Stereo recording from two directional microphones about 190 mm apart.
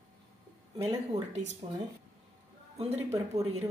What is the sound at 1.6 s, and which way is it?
Speech, 30° right (ahead or behind).